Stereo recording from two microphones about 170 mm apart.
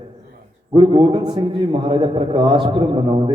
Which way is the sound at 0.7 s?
30° right (ahead or behind).